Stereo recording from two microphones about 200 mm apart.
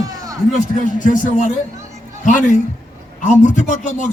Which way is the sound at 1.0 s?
40° left (ahead or behind).